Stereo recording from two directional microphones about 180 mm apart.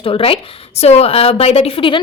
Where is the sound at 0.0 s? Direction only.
30° left (ahead or behind).